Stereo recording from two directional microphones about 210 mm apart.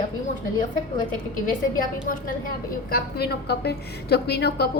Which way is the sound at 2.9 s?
50° left (ahead or behind).